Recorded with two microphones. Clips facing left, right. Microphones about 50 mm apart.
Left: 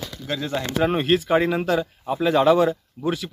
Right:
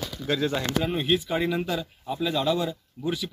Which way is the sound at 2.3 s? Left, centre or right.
Left.